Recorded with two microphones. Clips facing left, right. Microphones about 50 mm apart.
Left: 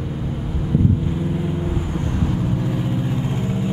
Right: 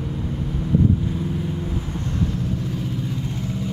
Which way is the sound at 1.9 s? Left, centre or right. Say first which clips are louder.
Left 3 dB; left.